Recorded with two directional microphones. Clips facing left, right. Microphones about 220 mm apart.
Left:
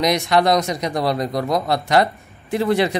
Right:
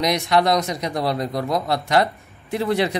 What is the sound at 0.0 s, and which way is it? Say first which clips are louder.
Speech: left 2 dB; 90° left.